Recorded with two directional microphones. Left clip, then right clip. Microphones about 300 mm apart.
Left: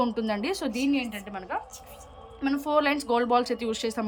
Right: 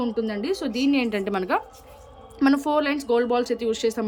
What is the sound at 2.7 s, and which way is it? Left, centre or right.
A woman's voice, centre.